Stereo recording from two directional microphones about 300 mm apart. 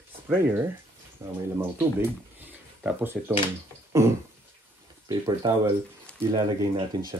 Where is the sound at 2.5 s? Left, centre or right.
Centre.